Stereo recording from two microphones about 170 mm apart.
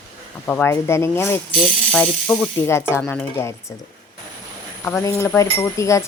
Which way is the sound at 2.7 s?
15° left (ahead or behind).